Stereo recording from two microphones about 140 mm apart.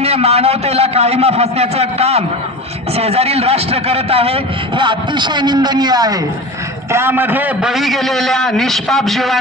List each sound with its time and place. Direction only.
0.0 s a man's voice: 45° right (ahead or behind); by 6.1 s 30° right (ahead or behind)
6.9 s a man's voice: 15° right (ahead or behind); by 9.4 s centre (ahead or behind)